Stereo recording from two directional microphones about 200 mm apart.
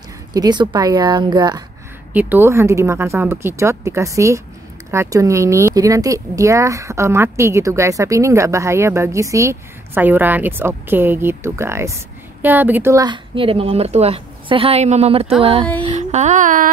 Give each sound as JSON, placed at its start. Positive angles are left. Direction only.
{"t": 0.3, "sound": "speech", "side_deg": -20}
{"t": 2.1, "sound": "speech", "side_deg": -10}
{"t": 15.9, "sound": "a sound", "side_deg": -35}